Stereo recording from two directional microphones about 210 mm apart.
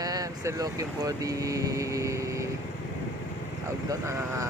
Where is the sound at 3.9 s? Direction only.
15° right (ahead or behind).